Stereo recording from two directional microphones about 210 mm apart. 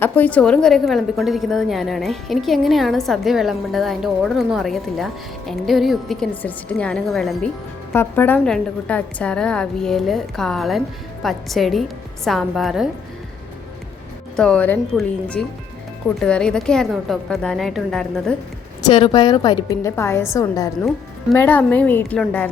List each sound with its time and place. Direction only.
0.0 s a woman's voice: 10° left (ahead or behind)
14.3 s a woman's voice: 5° left (ahead or behind)
18.8 s a woman's voice: 20° left (ahead or behind)